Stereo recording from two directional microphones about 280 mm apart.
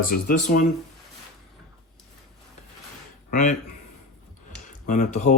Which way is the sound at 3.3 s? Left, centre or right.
Left.